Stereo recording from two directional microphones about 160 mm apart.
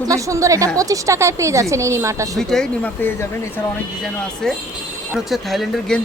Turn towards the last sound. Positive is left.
turn(degrees=0)  # may be behind; listen again after turning